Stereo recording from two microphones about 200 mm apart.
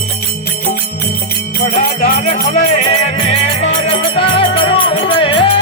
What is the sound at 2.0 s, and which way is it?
Music, 35° left (ahead or behind).